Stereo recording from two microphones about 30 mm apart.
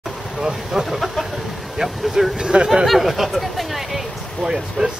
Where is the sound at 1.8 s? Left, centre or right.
Right.